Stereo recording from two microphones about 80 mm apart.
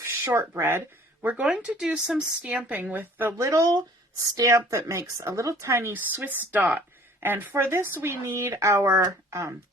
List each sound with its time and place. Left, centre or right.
0.1 s speech: right
1.2 s speech: centre
3.3 s speech: right
5.9 s speech: right